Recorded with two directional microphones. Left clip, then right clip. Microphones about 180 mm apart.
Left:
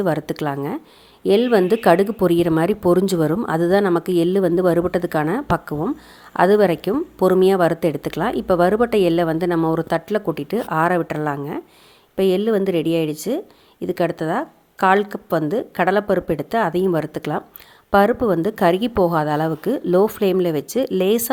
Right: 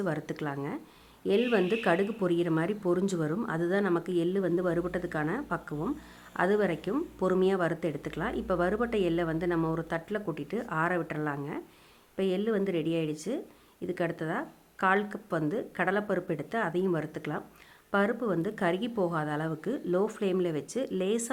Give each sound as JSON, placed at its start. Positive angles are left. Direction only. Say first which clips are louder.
{"t": 0.0, "sound": "a woman's voice", "louder": "left 12 dB", "side_deg": 35}